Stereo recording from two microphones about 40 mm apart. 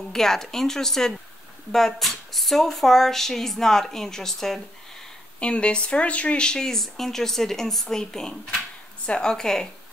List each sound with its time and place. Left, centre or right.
0.1 s speech: centre
5.4 s speech: left
6.4 s speech: centre